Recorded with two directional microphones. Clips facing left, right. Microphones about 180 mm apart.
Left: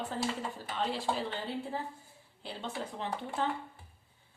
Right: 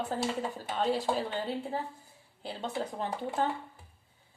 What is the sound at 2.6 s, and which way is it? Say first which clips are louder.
Speech: right 4 dB; 45° right (ahead or behind).